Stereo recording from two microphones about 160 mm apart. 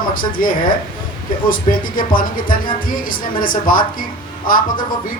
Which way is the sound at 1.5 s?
60° left (ahead or behind).